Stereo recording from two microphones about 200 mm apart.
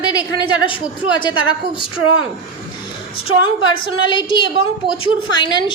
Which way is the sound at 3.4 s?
20° left (ahead or behind).